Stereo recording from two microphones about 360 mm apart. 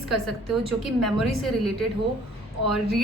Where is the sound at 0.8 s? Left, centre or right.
Centre.